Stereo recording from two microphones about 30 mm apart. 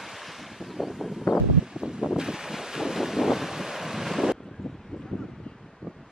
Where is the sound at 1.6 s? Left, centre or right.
Right.